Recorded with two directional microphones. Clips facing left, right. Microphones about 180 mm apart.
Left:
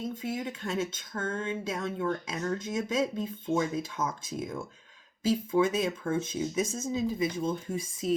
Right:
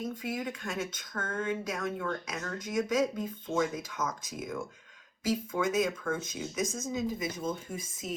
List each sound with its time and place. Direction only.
0.0 s speech: 25° left (ahead or behind)